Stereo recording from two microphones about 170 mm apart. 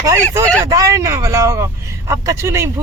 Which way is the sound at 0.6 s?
20° right (ahead or behind).